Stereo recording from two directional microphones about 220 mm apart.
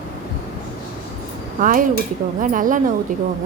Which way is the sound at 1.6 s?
40° right (ahead or behind).